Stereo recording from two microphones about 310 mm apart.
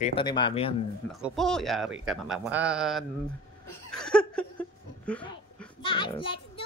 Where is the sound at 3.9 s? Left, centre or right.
Centre.